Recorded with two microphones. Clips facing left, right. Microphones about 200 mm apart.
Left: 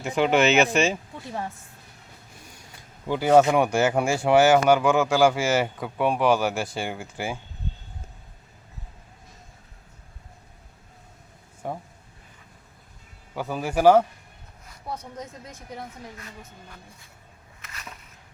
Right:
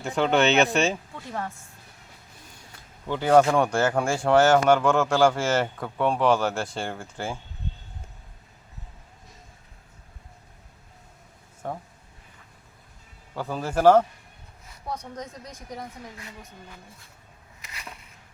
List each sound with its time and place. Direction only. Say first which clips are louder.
0.2 s speech: left 1 dB; centre (ahead or behind)
1.1 s speech: even; 15° left (ahead or behind)
3.1 s speech: left 1 dB; 10° left (ahead or behind)
11.6 s speech: left 1 dB; 10° left (ahead or behind)
13.3 s speech: left 1 dB; 10° left (ahead or behind)